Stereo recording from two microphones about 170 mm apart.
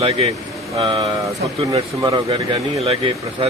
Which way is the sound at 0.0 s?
35° right (ahead or behind).